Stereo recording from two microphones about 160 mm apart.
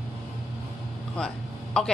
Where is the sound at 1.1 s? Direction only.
5° left (ahead or behind).